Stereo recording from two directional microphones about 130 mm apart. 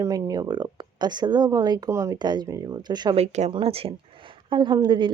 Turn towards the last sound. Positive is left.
turn(degrees=-35)  # may be behind; listen again after turning